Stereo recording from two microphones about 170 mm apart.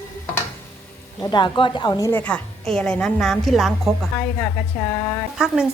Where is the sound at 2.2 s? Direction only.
5° left (ahead or behind).